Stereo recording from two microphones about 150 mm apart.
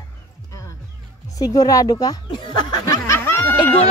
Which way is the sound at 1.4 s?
25° left (ahead or behind).